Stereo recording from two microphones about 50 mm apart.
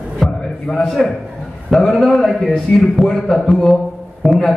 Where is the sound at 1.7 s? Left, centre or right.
Centre.